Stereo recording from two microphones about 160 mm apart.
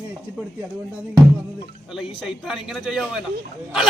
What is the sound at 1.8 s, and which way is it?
A man's voice, 5° right (ahead or behind).